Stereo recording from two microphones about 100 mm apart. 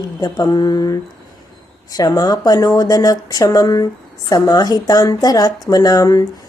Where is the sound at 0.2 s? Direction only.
40° left (ahead or behind).